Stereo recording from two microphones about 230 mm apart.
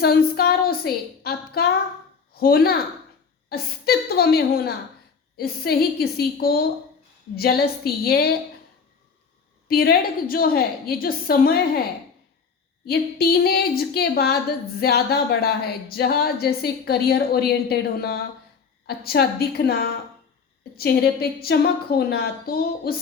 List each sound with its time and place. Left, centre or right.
0.0 s a woman's voice: left
9.6 s a woman's voice: left